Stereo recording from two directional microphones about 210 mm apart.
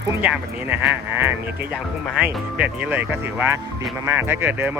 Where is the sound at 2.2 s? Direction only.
5° right (ahead or behind).